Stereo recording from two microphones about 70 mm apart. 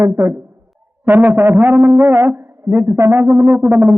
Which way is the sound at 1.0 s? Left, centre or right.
Right.